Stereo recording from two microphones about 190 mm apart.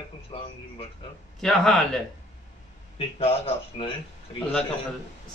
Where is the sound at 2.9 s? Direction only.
30° left (ahead or behind).